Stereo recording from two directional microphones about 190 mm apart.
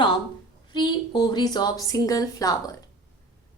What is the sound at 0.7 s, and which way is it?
A woman's voice, 25° left (ahead or behind).